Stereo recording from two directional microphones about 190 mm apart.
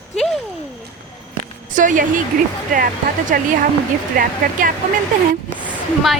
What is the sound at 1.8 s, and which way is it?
Speech, 45° right (ahead or behind).